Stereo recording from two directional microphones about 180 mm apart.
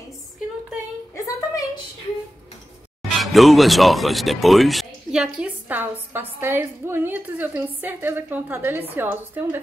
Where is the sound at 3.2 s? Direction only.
Centre (ahead or behind).